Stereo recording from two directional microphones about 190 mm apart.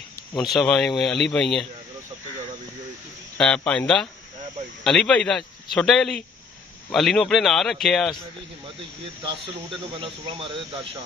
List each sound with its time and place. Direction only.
0.4 s a man's voice: centre (ahead or behind)
3.3 s a man's voice: 5° left (ahead or behind)
9.2 s speech: 25° right (ahead or behind)